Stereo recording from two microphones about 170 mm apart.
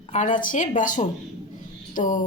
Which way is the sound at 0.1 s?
45° left (ahead or behind).